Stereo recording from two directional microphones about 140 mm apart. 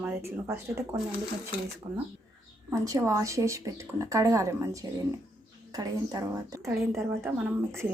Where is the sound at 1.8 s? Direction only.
30° right (ahead or behind).